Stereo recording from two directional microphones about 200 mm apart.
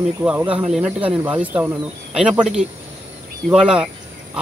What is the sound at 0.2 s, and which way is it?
Speech, 10° right (ahead or behind).